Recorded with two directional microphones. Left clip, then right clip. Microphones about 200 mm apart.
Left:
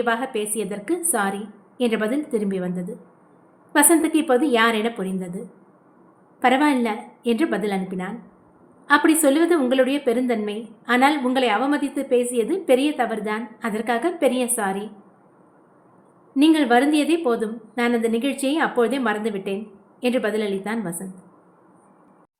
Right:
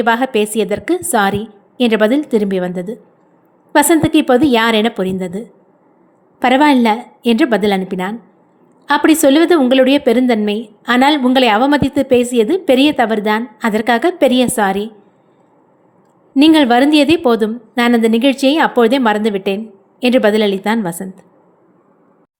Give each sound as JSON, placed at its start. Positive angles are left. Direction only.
{"t": 0.0, "sound": "a woman's voice", "side_deg": -40}
{"t": 6.4, "sound": "a woman's voice", "side_deg": -35}
{"t": 16.4, "sound": "a woman's voice", "side_deg": -40}